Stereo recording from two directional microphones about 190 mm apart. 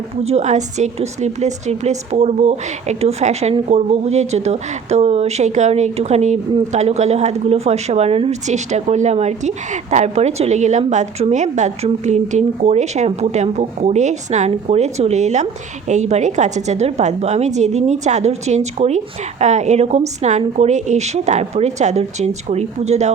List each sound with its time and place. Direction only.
0.2 s a woman's voice: 35° right (ahead or behind)